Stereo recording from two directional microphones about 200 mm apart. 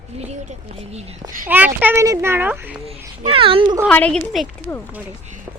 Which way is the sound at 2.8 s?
30° right (ahead or behind).